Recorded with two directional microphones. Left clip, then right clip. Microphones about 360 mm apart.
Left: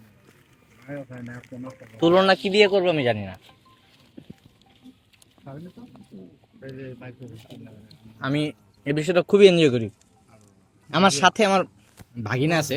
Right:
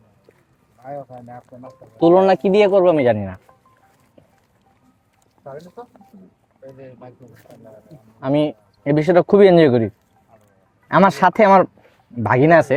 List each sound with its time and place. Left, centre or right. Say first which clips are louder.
2.1 s speech: right 3 dB; right
7.9 s speech: right 7 dB; right
10.9 s speech: right 5 dB; right
12.2 s speech: right 11 dB; right